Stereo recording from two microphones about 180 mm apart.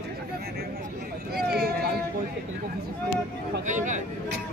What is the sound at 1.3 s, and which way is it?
Vehicle, 60° right (ahead or behind).